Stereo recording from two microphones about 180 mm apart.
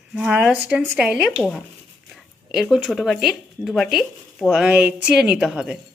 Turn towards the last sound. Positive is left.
turn(degrees=-5)  # may be behind; listen again after turning